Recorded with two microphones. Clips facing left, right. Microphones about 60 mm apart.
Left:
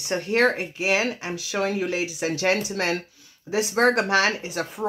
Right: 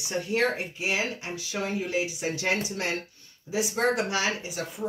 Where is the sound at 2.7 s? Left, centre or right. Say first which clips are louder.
Left 5 dB; left.